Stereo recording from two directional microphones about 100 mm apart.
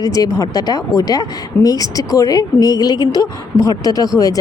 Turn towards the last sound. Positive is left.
turn(degrees=35)  # may be behind; listen again after turning